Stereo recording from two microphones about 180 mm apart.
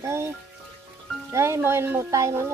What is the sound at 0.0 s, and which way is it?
Music, 15° right (ahead or behind).